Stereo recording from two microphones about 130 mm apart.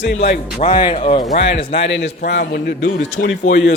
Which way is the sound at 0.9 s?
50° left (ahead or behind).